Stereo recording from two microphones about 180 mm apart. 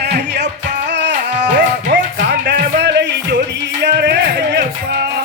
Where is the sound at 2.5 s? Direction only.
70° right (ahead or behind).